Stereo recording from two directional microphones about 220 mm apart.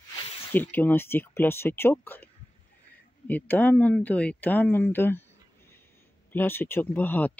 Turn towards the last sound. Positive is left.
turn(degrees=10)  # may be behind; listen again after turning